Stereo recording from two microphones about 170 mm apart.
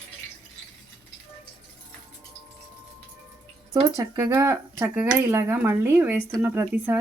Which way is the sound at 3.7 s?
15° right (ahead or behind).